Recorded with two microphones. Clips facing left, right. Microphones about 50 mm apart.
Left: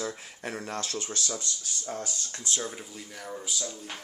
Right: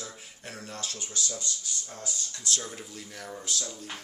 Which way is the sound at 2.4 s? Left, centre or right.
Left.